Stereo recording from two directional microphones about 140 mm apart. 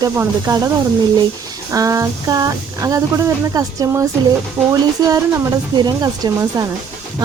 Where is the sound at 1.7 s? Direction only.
25° right (ahead or behind).